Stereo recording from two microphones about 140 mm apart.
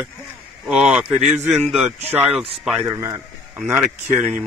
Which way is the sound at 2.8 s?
20° right (ahead or behind).